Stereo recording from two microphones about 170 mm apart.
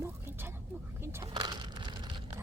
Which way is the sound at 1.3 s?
25° right (ahead or behind).